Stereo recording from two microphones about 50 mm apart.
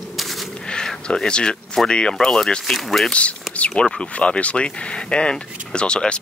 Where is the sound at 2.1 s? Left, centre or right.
Centre.